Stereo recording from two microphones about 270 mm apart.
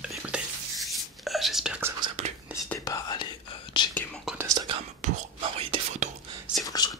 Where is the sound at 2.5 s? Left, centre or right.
Centre.